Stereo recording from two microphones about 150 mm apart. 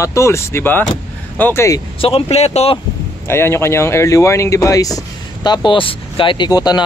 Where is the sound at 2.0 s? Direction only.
40° left (ahead or behind).